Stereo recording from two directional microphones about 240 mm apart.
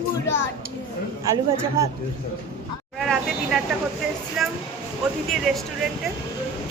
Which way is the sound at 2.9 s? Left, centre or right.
Centre.